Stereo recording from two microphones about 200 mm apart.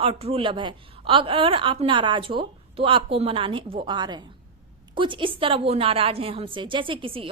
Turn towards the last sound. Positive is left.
turn(degrees=-25)  # may be behind; listen again after turning